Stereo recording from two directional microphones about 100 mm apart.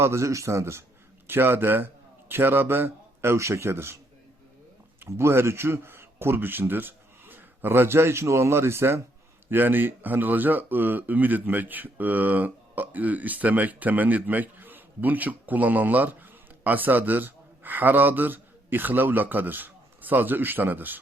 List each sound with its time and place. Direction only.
0.0 s a man's voice: 30° right (ahead or behind)
4.9 s speech: 25° right (ahead or behind)